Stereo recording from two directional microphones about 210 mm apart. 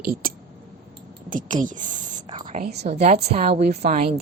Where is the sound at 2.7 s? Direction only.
50° right (ahead or behind).